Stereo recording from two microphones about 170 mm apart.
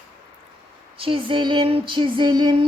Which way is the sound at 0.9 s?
30° right (ahead or behind).